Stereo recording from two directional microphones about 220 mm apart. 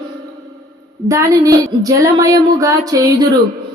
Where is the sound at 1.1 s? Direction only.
15° right (ahead or behind).